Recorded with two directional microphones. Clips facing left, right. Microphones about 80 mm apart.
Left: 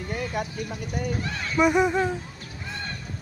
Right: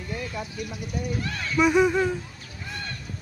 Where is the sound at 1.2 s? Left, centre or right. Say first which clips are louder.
Even; centre.